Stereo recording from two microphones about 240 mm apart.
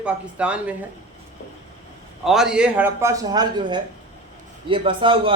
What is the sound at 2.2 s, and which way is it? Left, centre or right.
A man's voice, centre.